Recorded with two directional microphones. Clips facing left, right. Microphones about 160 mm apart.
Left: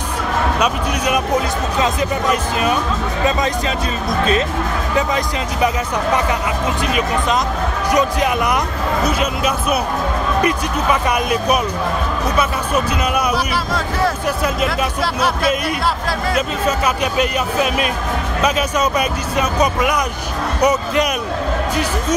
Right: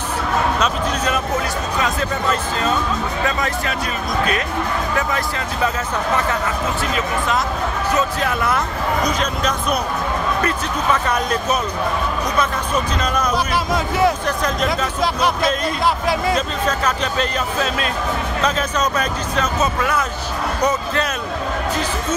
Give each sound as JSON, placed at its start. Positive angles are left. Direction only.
{"t": 0.6, "sound": "speech", "side_deg": 15}
{"t": 4.9, "sound": "speech", "side_deg": 20}
{"t": 6.9, "sound": "speech", "side_deg": 15}
{"t": 13.7, "sound": "speech", "side_deg": -20}
{"t": 14.2, "sound": "speech", "side_deg": 10}
{"t": 16.3, "sound": "speech", "side_deg": 10}